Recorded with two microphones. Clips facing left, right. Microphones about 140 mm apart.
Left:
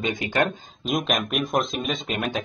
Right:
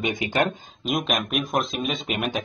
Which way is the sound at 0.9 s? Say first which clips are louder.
Left 1 dB; centre (ahead or behind).